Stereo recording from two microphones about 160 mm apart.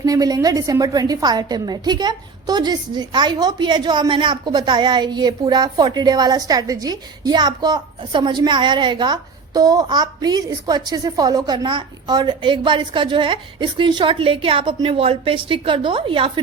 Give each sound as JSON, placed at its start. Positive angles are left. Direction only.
{"t": 0.0, "sound": "a woman's voice", "side_deg": -20}